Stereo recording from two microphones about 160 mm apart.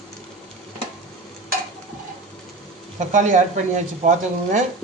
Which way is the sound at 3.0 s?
50° right (ahead or behind).